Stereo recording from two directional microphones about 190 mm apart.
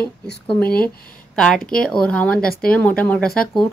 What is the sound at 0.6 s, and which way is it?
Speech, 55° left (ahead or behind).